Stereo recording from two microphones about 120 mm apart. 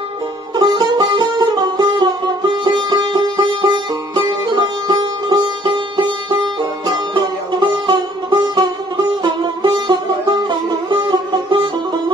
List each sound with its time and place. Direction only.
0.6 s music: 35° right (ahead or behind)
7.2 s music: 40° right (ahead or behind)